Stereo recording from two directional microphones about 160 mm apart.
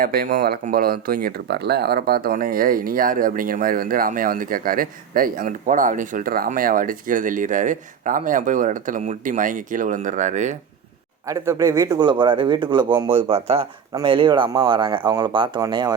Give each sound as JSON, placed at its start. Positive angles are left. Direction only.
{"t": 0.0, "sound": "speech", "side_deg": -65}
{"t": 11.3, "sound": "speech", "side_deg": -20}